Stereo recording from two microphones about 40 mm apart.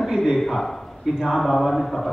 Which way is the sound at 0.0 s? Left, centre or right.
Centre.